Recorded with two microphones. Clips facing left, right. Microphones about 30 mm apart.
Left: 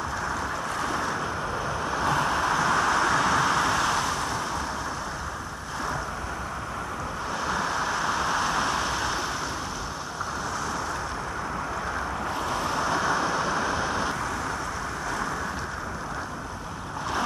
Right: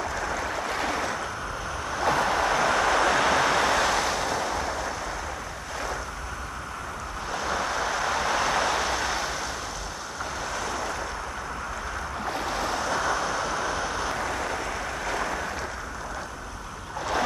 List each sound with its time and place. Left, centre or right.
0.3 s waves: right
2.0 s waves: right
2.8 s vehicle: right
7.4 s vehicle: centre
12.4 s waves: centre
12.7 s vehicle: centre